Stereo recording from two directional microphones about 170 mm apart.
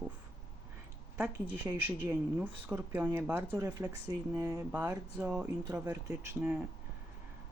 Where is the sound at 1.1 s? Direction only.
5° right (ahead or behind).